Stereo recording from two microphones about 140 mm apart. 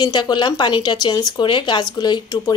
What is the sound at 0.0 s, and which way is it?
A woman's voice, 30° left (ahead or behind).